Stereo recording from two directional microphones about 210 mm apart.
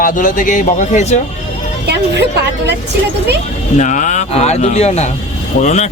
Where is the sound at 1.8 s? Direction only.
55° right (ahead or behind).